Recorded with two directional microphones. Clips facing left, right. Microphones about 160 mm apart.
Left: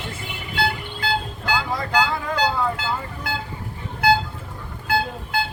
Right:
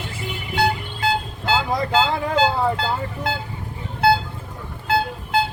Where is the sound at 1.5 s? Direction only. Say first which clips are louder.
Right 4 dB; 20° right (ahead or behind).